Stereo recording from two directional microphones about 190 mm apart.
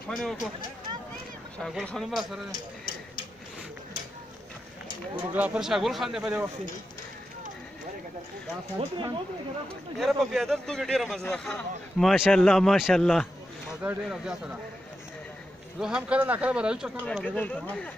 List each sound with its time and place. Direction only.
0.1 s a man's voice: centre (ahead or behind)
1.6 s a man's voice: centre (ahead or behind)
5.3 s a man's voice: 5° right (ahead or behind)
8.7 s speech: 25° right (ahead or behind)
9.9 s a man's voice: centre (ahead or behind)
15.8 s a man's voice: 5° right (ahead or behind)
17.0 s speech: 5° left (ahead or behind)